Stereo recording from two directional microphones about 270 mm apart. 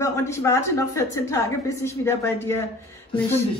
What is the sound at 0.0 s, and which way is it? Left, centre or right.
A woman's voice, centre.